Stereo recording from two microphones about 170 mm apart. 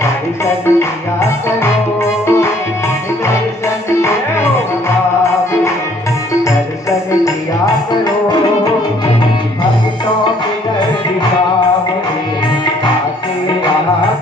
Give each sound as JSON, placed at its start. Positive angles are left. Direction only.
{"t": 0.0, "sound": "music", "side_deg": 15}
{"t": 2.2, "sound": "music", "side_deg": 15}
{"t": 4.0, "sound": "music", "side_deg": 15}